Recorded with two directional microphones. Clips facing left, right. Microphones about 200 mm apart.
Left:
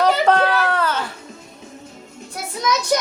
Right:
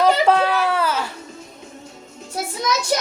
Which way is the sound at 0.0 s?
5° right (ahead or behind).